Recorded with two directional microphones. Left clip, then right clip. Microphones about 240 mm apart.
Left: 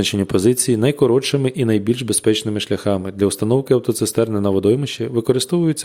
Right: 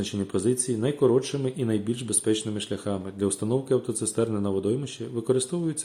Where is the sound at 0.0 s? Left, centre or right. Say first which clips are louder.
Left 10 dB; left.